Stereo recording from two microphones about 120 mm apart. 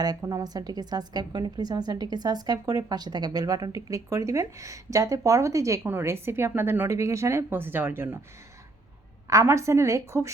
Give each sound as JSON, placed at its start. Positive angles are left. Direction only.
{"t": 0.0, "sound": "a woman's voice", "side_deg": -30}
{"t": 9.2, "sound": "a woman's voice", "side_deg": -25}